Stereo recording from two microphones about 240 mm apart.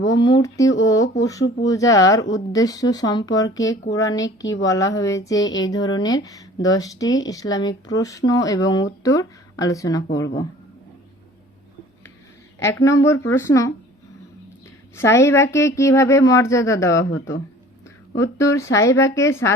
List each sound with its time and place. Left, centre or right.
0.0 s speech: centre
12.5 s speech: centre
14.9 s speech: centre
17.0 s speech: left
18.2 s speech: centre